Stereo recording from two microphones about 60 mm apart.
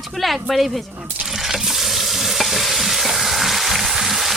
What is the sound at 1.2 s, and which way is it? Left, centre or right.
Stir, centre.